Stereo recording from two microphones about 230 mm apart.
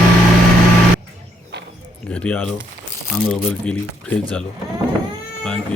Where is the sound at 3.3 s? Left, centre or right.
Centre.